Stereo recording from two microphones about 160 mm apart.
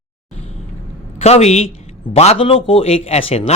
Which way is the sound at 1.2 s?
40° left (ahead or behind).